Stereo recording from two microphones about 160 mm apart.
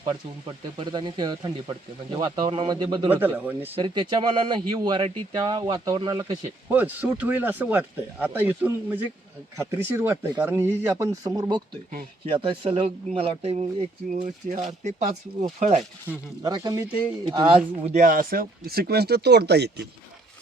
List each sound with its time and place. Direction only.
0.0 s speech: 30° right (ahead or behind)
3.1 s speech: 10° right (ahead or behind)
3.8 s speech: 30° right (ahead or behind)
6.7 s speech: 10° right (ahead or behind)
12.2 s speech: 35° right (ahead or behind)
16.4 s speech: 25° right (ahead or behind)
17.9 s speech: 55° right (ahead or behind); by 19.9 s 90° right